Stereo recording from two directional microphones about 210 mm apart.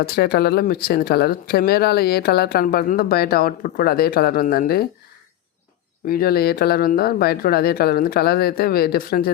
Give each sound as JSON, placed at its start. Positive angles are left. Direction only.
{"t": 0.0, "sound": "speech", "side_deg": 50}
{"t": 6.1, "sound": "speech", "side_deg": 45}